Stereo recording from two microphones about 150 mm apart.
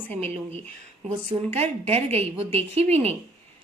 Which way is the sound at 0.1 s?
45° right (ahead or behind).